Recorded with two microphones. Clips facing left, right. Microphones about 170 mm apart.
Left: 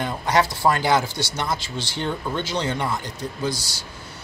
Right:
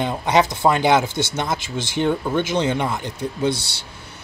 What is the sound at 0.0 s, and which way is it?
Speech, 20° right (ahead or behind).